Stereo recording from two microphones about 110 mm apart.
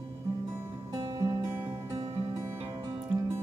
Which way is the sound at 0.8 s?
35° right (ahead or behind).